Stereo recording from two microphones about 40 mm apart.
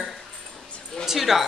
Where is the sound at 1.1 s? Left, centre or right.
Centre.